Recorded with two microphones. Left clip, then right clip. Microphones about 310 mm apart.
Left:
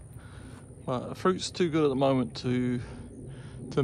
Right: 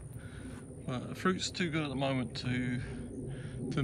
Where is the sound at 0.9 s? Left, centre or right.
Centre.